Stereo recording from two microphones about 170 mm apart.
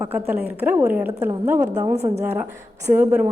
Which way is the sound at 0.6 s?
10° right (ahead or behind).